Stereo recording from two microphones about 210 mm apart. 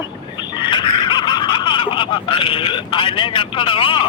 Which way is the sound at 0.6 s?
20° left (ahead or behind).